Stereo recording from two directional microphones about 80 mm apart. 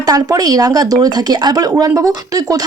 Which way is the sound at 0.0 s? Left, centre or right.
Right.